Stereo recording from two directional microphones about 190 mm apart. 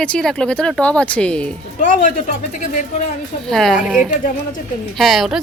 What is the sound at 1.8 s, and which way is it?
Speech, 40° left (ahead or behind).